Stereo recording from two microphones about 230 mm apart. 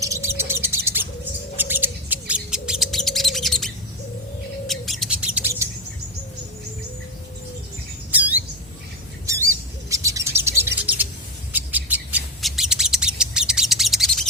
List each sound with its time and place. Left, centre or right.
0.0 s bird: centre
8.1 s squawk: centre
9.2 s bird: centre